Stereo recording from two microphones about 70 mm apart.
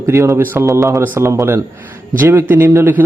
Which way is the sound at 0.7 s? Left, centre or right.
Right.